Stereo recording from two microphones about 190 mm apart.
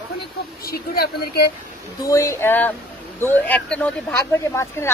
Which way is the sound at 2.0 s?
15° left (ahead or behind).